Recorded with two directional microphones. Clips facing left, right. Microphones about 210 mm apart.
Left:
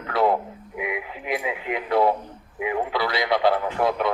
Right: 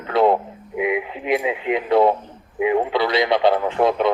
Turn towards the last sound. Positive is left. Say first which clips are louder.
# right 5 dB
turn(degrees=-25)  # may be behind; listen again after turning